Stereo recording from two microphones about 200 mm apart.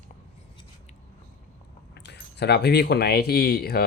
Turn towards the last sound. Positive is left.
turn(degrees=50)  # may be behind; listen again after turning